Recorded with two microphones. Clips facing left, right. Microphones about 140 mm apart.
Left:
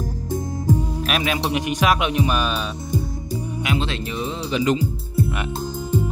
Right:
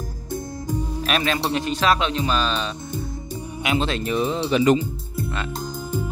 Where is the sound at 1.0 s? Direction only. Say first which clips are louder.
Right 2 dB; 5° left (ahead or behind).